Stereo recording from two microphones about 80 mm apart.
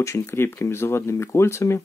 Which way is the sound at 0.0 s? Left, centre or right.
Left.